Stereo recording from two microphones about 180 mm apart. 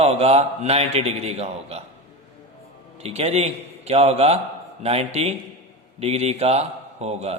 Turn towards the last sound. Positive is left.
turn(degrees=-35)  # may be behind; listen again after turning